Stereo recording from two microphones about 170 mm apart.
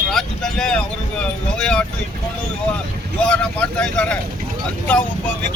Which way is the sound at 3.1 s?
5° left (ahead or behind).